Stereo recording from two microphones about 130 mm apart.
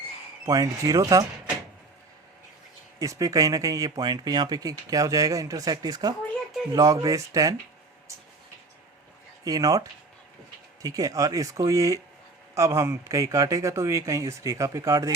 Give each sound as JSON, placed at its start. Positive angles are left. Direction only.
{"t": 0.4, "sound": "speech", "side_deg": -25}
{"t": 3.0, "sound": "speech", "side_deg": -25}
{"t": 9.4, "sound": "speech", "side_deg": -30}
{"t": 10.8, "sound": "speech", "side_deg": -25}